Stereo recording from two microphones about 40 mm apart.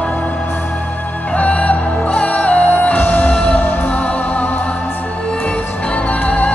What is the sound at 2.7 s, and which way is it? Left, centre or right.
Music, left.